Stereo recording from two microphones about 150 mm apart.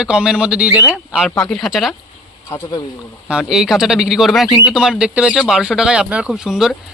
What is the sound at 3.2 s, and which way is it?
Speech, 5° right (ahead or behind).